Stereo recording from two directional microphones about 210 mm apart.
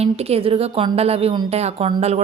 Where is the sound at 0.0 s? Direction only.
30° right (ahead or behind).